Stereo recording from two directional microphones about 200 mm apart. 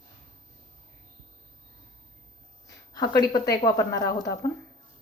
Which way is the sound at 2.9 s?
20° left (ahead or behind).